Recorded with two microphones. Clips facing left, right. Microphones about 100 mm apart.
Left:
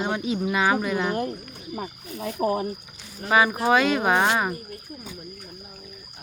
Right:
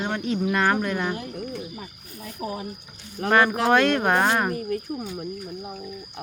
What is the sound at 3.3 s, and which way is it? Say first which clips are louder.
Speech: right 1 dB; 5° left (ahead or behind).